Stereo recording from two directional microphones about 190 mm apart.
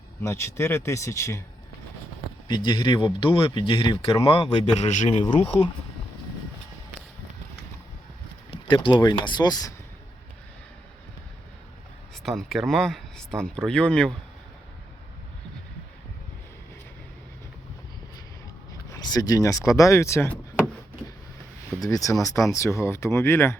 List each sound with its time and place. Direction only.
0.2 s speech: 15° left (ahead or behind)
2.5 s a man's voice: 25° left (ahead or behind)
8.6 s a man's voice: 25° left (ahead or behind)
12.2 s speech: centre (ahead or behind)
18.9 s speech: 20° left (ahead or behind)
21.7 s speech: 15° left (ahead or behind)